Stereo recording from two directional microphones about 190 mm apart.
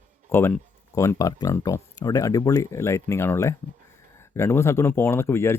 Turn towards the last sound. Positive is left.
turn(degrees=15)  # may be behind; listen again after turning